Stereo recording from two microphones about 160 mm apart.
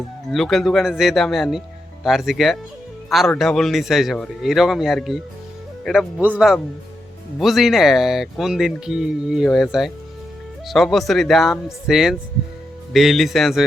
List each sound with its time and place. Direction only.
0.3 s speech: centre (ahead or behind)